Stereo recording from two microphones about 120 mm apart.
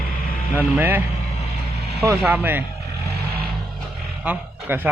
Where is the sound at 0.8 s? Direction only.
15° right (ahead or behind).